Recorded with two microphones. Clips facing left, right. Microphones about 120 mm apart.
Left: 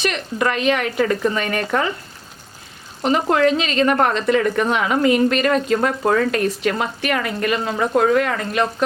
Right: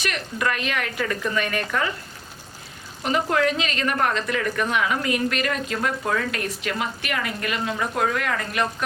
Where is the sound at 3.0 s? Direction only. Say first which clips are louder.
Left 5 dB; 30° left (ahead or behind).